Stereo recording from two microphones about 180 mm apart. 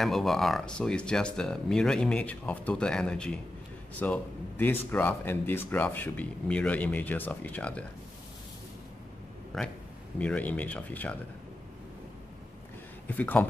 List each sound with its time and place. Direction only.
0.0 s speech: centre (ahead or behind)
9.6 s speech: centre (ahead or behind)
13.0 s speech: 10° left (ahead or behind)